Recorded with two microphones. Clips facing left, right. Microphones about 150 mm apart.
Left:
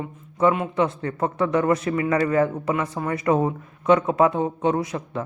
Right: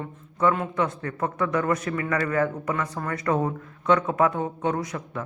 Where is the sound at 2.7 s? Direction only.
10° left (ahead or behind).